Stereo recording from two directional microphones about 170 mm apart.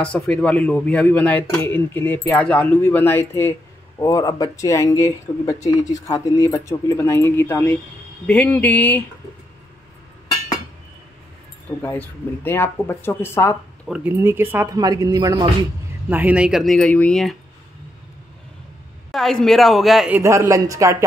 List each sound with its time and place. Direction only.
0.0 s a man's voice: 5° left (ahead or behind)
11.8 s a man's voice: 10° left (ahead or behind)
13.8 s speech: 10° right (ahead or behind)
16.1 s speech: 10° right (ahead or behind)
19.1 s speech: centre (ahead or behind)
20.2 s speech: 15° right (ahead or behind)